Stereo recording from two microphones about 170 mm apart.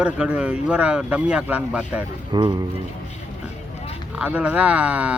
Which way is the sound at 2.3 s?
25° right (ahead or behind).